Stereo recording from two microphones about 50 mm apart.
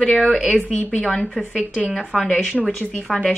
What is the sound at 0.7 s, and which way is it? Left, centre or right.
Speech, left.